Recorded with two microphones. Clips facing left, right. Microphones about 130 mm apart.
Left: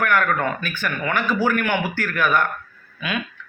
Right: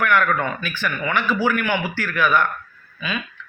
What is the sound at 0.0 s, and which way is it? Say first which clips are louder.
Speech: right 1 dB; 45° left (ahead or behind).